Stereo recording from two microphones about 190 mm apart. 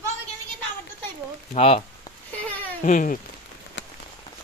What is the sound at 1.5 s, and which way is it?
Speech, 30° left (ahead or behind).